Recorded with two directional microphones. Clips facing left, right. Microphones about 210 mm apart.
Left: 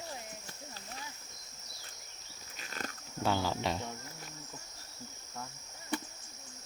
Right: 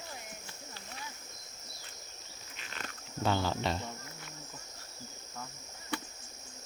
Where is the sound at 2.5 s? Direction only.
40° left (ahead or behind).